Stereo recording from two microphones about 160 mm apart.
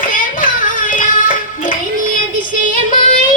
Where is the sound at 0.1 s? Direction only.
55° left (ahead or behind).